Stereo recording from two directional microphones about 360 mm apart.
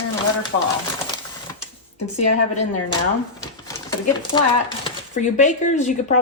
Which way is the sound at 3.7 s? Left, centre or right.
Centre.